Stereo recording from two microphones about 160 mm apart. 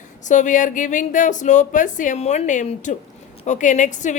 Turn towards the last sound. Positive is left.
turn(degrees=50)  # may be behind; listen again after turning